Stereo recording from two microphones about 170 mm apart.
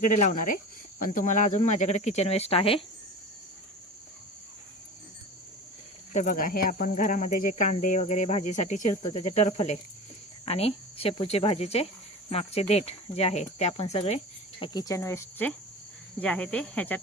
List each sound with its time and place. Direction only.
0.2 s speech: 50° left (ahead or behind); by 2.8 s 35° left (ahead or behind)
6.1 s speech: 50° left (ahead or behind)
14.6 s cricket: 20° left (ahead or behind)